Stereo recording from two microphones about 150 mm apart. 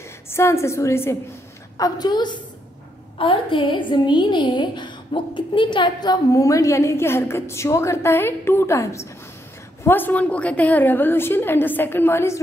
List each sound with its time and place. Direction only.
0.0 s a woman's voice: 20° left (ahead or behind)